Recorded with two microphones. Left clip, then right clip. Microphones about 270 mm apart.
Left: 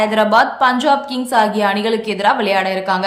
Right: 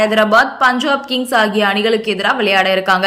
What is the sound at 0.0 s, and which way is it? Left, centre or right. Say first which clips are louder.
A woman's voice: right 1 dB; centre.